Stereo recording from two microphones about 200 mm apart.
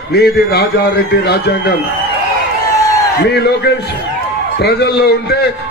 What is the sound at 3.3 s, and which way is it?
A man's voice, 55° left (ahead or behind).